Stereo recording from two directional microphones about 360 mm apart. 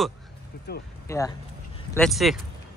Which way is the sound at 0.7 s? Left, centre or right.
Left.